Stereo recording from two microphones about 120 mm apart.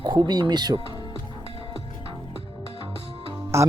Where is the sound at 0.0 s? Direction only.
35° right (ahead or behind).